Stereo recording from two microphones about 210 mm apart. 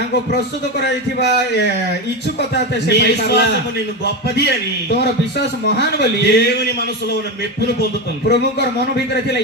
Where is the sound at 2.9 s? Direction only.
55° left (ahead or behind).